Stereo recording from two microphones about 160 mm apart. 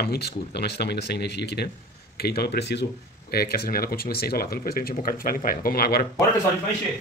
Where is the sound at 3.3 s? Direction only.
70° left (ahead or behind).